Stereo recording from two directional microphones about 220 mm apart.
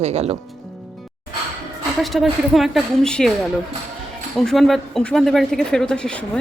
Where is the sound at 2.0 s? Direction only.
Centre (ahead or behind).